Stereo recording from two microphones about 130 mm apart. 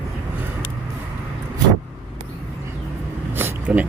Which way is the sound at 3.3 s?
15° right (ahead or behind).